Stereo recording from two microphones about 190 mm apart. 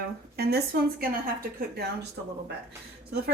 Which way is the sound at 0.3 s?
55° right (ahead or behind).